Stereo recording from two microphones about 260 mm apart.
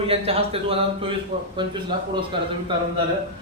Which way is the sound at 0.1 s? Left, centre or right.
Right.